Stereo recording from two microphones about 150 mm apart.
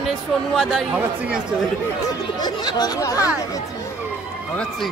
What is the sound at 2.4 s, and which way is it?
Speech, 30° left (ahead or behind).